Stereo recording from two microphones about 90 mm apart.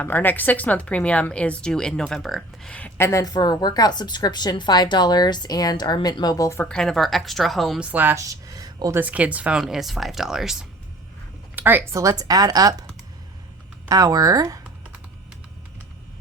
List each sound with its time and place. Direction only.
0.0 s a woman's voice: 20° left (ahead or behind); by 2.7 s 5° left (ahead or behind)
3.0 s a woman's voice: 35° left (ahead or behind)
3.3 s speech: 50° left (ahead or behind); by 6.7 s 35° left (ahead or behind)
6.7 s speech: 5° left (ahead or behind)
7.8 s speech: 15° right (ahead or behind)
8.1 s a sound: 35° right (ahead or behind)
9.0 s speech: 15° right (ahead or behind)
11.5 s speech: 20° right (ahead or behind)
11.9 s a woman's voice: 40° right (ahead or behind)
13.8 s speech: 40° right (ahead or behind)